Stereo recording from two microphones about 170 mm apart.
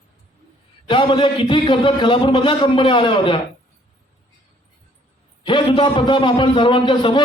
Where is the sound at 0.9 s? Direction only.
30° left (ahead or behind).